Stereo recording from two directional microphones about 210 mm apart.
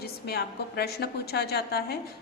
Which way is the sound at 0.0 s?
50° left (ahead or behind).